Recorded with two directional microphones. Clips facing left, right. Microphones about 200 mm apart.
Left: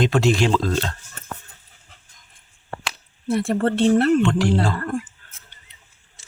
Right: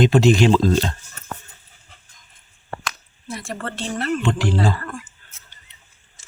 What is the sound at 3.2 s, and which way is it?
Speech, 60° left (ahead or behind).